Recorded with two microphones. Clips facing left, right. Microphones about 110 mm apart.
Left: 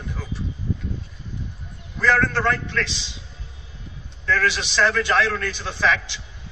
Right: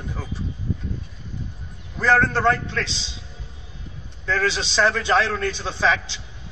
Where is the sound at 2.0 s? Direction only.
15° right (ahead or behind).